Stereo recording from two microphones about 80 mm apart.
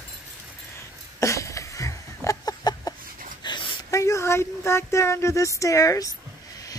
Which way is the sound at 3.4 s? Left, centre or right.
Left.